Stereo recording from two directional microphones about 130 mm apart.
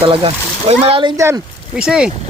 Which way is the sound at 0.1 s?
45° right (ahead or behind).